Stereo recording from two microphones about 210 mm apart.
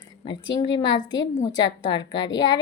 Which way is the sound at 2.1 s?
20° left (ahead or behind).